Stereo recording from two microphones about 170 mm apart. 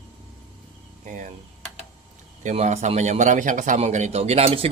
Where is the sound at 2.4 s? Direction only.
45° right (ahead or behind).